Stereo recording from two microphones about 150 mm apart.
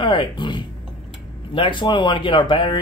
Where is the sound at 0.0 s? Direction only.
30° left (ahead or behind).